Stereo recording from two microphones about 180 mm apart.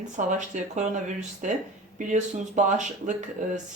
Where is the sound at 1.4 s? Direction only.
45° right (ahead or behind).